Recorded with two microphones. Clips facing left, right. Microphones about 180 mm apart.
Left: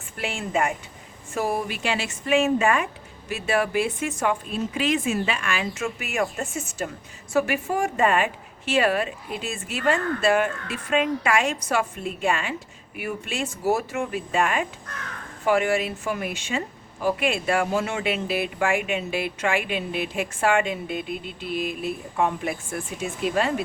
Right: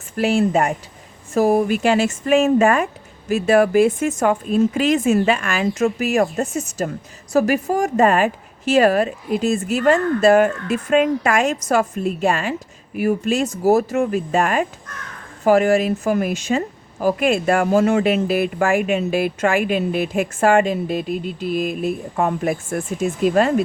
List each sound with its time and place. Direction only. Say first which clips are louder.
0.2 s a woman's voice: right 9 dB; 40° right (ahead or behind)